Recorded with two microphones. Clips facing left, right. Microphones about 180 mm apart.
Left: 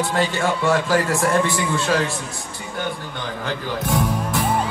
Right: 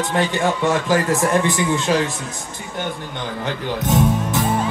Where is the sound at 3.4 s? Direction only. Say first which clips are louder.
Right 2 dB; 20° right (ahead or behind).